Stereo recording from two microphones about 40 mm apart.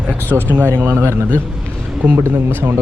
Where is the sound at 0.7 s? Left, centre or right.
Right.